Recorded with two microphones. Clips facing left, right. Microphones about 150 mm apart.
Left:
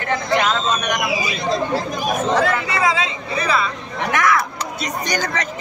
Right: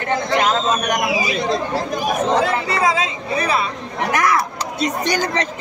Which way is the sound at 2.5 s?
35° right (ahead or behind).